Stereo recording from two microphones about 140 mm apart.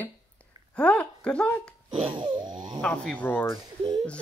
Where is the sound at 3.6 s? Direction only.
30° right (ahead or behind).